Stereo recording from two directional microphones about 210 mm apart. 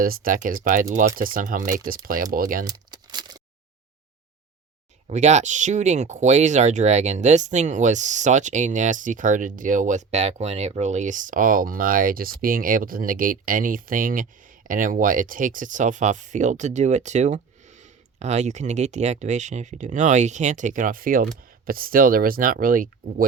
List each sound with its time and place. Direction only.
0.0 s speech: 45° right (ahead or behind)
2.6 s a sound: 20° right (ahead or behind)
5.0 s speech: 35° right (ahead or behind)